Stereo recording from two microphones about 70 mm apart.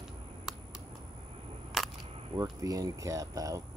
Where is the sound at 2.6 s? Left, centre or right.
Right.